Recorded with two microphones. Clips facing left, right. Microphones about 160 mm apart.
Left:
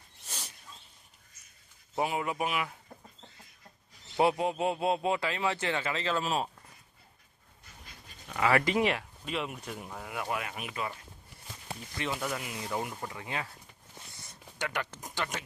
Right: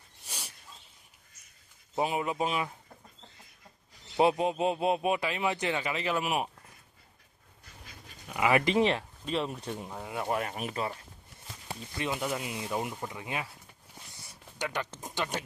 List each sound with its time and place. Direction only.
0.3 s a sound: 10° right (ahead or behind)
2.0 s speech: 20° right (ahead or behind)
4.2 s speech: 20° right (ahead or behind)
8.3 s speech: 15° right (ahead or behind); by 10.9 s 35° right (ahead or behind)
11.9 s speech: 20° right (ahead or behind)
14.6 s speech: 20° right (ahead or behind)